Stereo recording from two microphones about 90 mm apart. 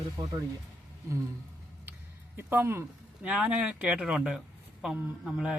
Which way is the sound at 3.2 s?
10° right (ahead or behind).